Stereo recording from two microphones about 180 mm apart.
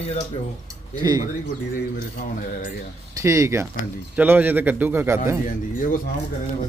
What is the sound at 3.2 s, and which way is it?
A man's voice, 15° right (ahead or behind).